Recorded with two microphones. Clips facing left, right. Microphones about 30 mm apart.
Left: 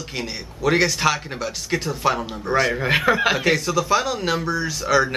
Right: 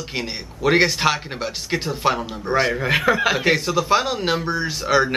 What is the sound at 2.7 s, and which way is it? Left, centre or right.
Speech, centre.